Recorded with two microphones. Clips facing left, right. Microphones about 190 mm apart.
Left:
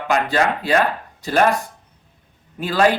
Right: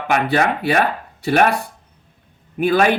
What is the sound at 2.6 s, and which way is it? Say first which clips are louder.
Speech: right 2 dB; 60° right (ahead or behind).